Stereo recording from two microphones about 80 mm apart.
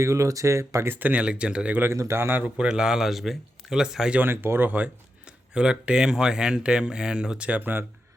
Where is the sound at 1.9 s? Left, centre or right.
Right.